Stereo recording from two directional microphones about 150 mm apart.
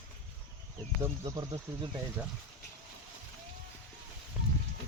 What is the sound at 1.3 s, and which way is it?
Speech, 25° right (ahead or behind).